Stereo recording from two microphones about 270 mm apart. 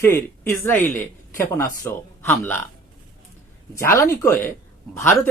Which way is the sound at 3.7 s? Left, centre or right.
Centre.